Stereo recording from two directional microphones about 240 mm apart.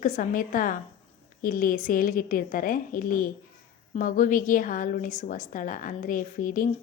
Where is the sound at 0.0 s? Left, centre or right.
Left.